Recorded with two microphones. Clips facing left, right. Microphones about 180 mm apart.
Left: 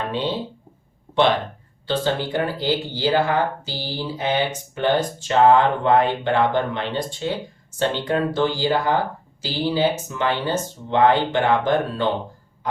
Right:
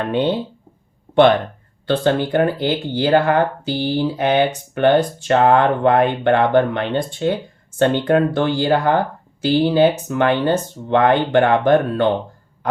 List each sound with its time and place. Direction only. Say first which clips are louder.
0.1 s speech: right 9 dB; 55° right (ahead or behind)
1.9 s speech: right 5 dB; 55° right (ahead or behind)